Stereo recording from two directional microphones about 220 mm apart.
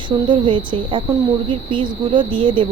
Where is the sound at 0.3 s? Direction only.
20° right (ahead or behind).